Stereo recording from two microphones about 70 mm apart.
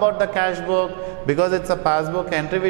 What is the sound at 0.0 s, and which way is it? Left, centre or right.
A man's voice, centre.